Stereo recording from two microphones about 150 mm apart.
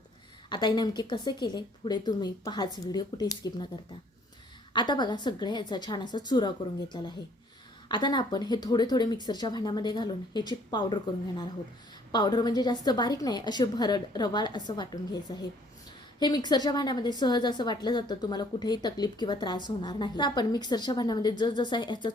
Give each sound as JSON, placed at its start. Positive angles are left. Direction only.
{"t": 0.5, "sound": "a woman's voice", "side_deg": 30}
{"t": 4.7, "sound": "a woman's voice", "side_deg": 30}
{"t": 7.9, "sound": "a woman's voice", "side_deg": 30}